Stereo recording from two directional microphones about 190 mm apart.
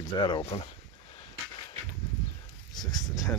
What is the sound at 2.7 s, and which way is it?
Speech, 20° left (ahead or behind).